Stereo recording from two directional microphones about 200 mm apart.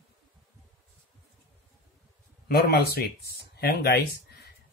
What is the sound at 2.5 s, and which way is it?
Speech, 50° left (ahead or behind).